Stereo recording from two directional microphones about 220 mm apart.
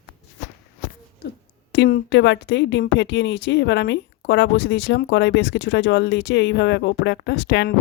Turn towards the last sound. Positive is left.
turn(degrees=50)  # may be behind; listen again after turning